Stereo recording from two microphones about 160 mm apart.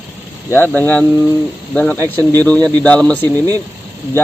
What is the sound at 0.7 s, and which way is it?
Speech, 10° left (ahead or behind).